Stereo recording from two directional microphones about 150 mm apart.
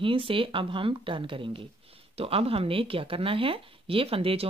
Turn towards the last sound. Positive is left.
turn(degrees=-40)  # may be behind; listen again after turning